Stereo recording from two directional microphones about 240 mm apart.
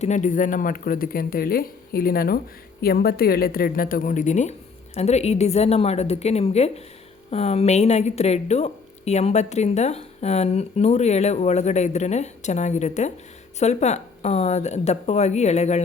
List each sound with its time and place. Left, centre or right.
0.0 s a woman's voice: left